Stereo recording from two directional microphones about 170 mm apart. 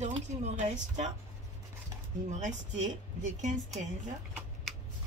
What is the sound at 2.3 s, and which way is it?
Speech, 45° right (ahead or behind).